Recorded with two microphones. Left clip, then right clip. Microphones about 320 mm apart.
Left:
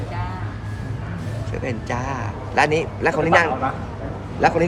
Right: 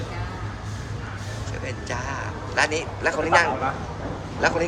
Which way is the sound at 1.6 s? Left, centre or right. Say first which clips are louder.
Left 5 dB; left.